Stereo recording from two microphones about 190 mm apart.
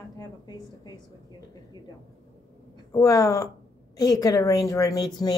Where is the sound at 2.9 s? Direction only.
15° left (ahead or behind).